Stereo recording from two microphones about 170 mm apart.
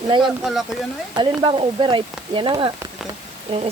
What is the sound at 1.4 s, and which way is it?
Speech, 30° right (ahead or behind).